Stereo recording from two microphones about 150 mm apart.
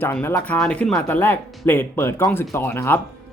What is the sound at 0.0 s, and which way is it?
Speech, 15° left (ahead or behind).